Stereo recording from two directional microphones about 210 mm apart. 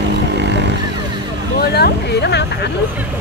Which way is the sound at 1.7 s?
50° left (ahead or behind).